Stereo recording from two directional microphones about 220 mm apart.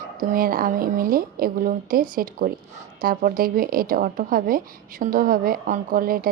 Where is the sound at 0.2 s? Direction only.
40° right (ahead or behind).